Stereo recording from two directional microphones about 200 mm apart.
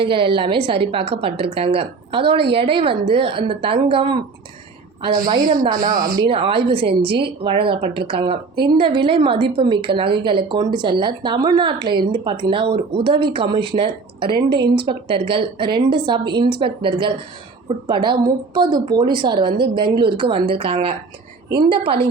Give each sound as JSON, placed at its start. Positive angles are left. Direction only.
{"t": 0.0, "sound": "speech", "side_deg": -25}
{"t": 5.3, "sound": "speech", "side_deg": -25}
{"t": 5.7, "sound": "speech", "side_deg": -45}
{"t": 6.2, "sound": "speech", "side_deg": -25}